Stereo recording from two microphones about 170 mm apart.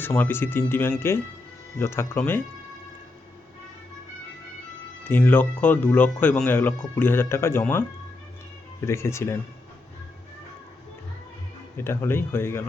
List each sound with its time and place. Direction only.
0.0 s speech: 10° left (ahead or behind)
5.0 s speech: 10° left (ahead or behind)
11.8 s speech: 15° left (ahead or behind)